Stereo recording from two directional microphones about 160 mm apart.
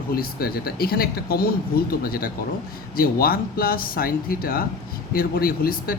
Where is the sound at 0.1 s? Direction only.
70° left (ahead or behind).